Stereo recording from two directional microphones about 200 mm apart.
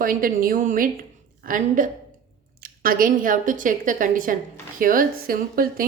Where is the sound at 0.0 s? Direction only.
45° right (ahead or behind).